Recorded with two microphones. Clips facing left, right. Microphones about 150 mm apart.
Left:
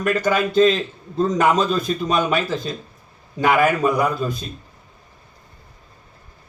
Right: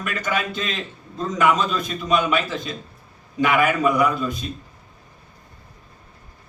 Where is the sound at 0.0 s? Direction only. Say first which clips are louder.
Left 6 dB; 35° left (ahead or behind).